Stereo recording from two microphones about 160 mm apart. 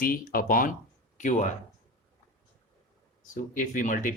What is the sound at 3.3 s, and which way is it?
Speech, 55° left (ahead or behind).